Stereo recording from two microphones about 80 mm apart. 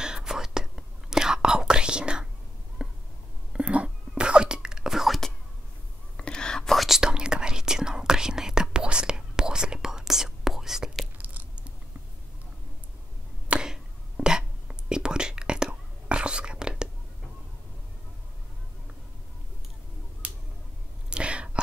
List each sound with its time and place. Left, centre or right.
0.0 s whispering: centre
2.8 s a sound: centre
3.5 s whispering: centre
6.1 s whispering: centre
11.1 s crunch: centre
13.5 s a sound: centre
14.9 s whispering: centre
21.1 s whispering: centre